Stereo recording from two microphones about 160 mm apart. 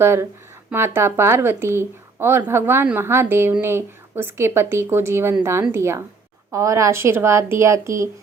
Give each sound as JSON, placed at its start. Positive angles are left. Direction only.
{"t": 0.0, "sound": "a woman's voice", "side_deg": -15}